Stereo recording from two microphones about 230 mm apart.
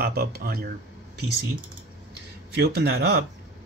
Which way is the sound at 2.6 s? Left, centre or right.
Right.